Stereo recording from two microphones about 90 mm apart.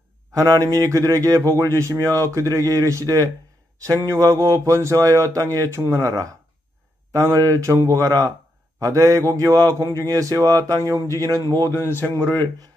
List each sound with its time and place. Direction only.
0.3 s speech: 40° right (ahead or behind)
11.9 s speech: 20° left (ahead or behind)